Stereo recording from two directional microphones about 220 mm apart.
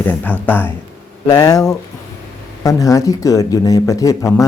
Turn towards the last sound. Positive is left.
turn(degrees=15)  # may be behind; listen again after turning